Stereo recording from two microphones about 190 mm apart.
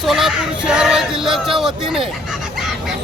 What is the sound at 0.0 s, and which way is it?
Child singing, centre (ahead or behind).